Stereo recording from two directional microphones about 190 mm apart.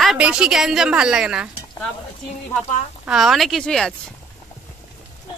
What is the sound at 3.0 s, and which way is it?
Speech, centre (ahead or behind).